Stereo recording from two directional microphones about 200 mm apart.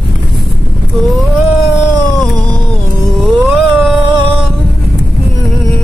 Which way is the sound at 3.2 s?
Centre (ahead or behind).